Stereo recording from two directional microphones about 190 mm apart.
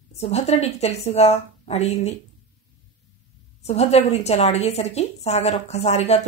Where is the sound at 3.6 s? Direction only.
35° left (ahead or behind).